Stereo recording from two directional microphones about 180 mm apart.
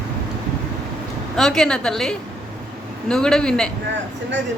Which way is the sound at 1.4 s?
5° left (ahead or behind).